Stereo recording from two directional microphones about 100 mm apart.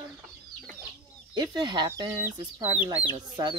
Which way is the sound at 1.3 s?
50° right (ahead or behind).